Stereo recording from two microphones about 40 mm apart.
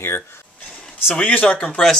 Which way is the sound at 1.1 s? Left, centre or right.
Left.